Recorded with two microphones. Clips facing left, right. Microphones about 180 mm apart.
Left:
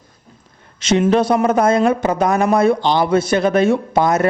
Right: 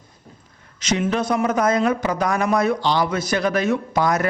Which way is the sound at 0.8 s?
30° left (ahead or behind).